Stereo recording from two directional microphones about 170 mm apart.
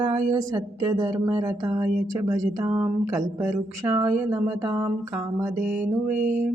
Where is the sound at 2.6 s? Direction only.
15° right (ahead or behind).